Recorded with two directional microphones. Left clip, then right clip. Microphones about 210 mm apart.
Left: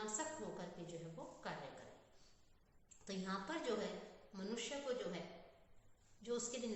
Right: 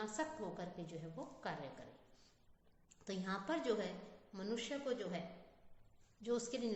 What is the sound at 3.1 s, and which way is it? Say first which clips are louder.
Speech: right 3 dB; 50° right (ahead or behind).